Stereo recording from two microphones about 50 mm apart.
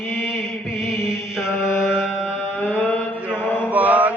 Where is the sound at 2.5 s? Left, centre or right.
Left.